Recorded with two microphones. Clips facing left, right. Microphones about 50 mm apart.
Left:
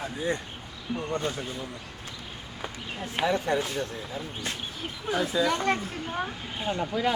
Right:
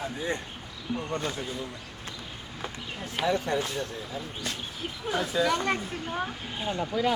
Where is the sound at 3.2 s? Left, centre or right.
Left.